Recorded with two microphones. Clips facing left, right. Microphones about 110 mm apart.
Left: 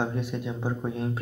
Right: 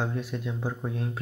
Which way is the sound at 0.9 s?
5° left (ahead or behind).